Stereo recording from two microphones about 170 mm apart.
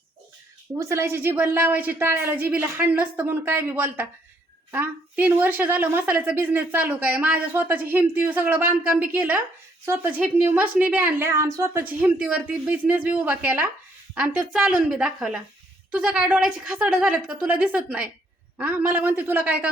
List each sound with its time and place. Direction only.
0.8 s a woman's voice: 15° right (ahead or behind)